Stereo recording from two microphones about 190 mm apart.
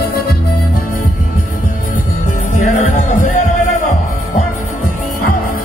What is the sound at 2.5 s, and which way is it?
Music, 40° left (ahead or behind).